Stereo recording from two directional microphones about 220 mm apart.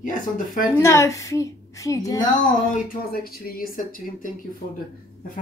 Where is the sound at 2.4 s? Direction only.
35° left (ahead or behind).